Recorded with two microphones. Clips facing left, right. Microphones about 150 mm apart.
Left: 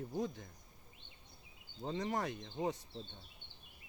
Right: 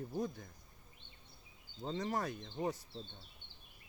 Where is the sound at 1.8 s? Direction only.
25° left (ahead or behind).